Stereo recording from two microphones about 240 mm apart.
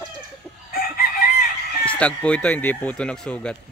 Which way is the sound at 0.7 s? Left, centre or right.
Left.